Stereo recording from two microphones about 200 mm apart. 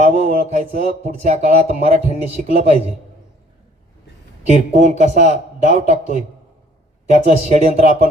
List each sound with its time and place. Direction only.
0.0 s a man's voice: 35° right (ahead or behind)
4.4 s speech: 35° right (ahead or behind)